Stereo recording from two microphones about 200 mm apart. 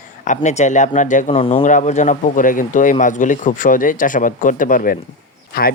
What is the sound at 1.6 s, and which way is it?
Speech, 40° left (ahead or behind).